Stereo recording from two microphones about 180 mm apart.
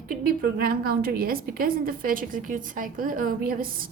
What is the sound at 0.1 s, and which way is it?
A woman's voice, 55° right (ahead or behind).